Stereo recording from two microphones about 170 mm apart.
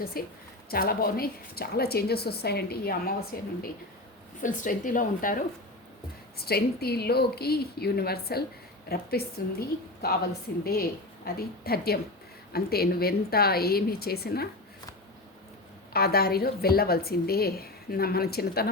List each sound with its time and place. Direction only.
0.1 s a woman's voice: 60° left (ahead or behind)
4.4 s a woman's voice: 50° left (ahead or behind)
6.3 s a woman's voice: 65° left (ahead or behind)
15.9 s a woman's voice: 65° left (ahead or behind)